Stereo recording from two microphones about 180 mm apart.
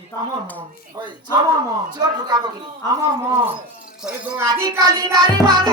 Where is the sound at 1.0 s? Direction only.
20° right (ahead or behind).